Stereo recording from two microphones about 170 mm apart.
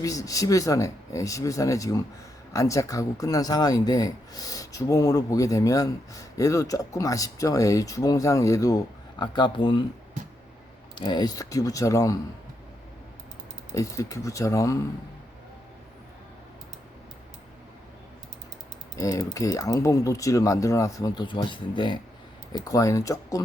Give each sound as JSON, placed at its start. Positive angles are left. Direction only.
{"t": 0.0, "sound": "speech", "side_deg": 20}
{"t": 10.9, "sound": "speech", "side_deg": 25}
{"t": 13.7, "sound": "speech", "side_deg": 20}
{"t": 18.9, "sound": "speech", "side_deg": 20}